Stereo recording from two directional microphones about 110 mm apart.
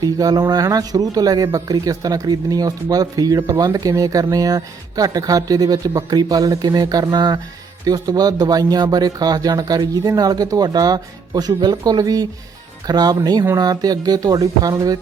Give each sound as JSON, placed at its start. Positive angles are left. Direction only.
{"t": 0.0, "sound": "speech", "side_deg": -35}